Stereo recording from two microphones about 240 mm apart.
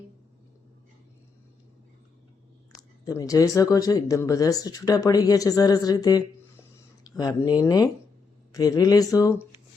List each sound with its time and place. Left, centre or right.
2.7 s speech: centre